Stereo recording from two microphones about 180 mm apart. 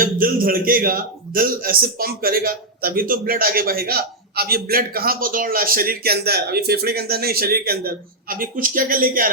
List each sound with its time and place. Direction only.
0.0 s a man's voice: 50° right (ahead or behind)